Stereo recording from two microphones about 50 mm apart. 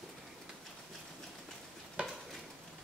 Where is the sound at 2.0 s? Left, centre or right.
Right.